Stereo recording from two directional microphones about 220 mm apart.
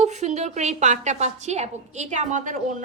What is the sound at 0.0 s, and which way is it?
A woman's voice, 30° right (ahead or behind).